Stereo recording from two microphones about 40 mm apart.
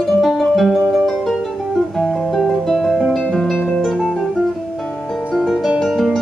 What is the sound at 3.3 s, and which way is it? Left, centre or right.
Music, centre.